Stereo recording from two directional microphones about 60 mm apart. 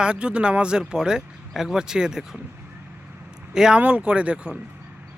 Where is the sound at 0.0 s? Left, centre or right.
Centre.